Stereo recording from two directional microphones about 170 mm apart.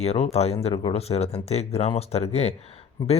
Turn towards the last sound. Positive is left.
turn(degrees=30)  # may be behind; listen again after turning